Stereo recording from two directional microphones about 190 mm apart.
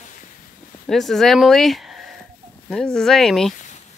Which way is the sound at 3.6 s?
40° left (ahead or behind).